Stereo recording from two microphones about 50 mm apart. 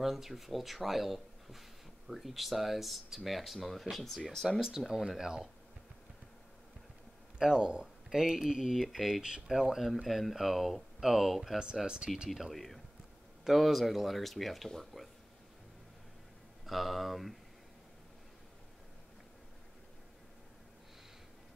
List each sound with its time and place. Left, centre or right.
0.0 s speech: centre
4.5 s speech: centre
7.3 s speech: centre
9.2 s speech: centre
11.7 s speech: centre
12.4 s speech: centre
16.6 s speech: centre